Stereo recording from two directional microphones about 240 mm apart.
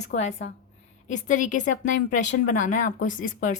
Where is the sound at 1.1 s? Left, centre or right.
Left.